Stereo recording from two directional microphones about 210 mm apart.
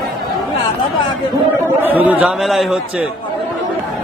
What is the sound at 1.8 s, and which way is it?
A man's voice, 5° right (ahead or behind).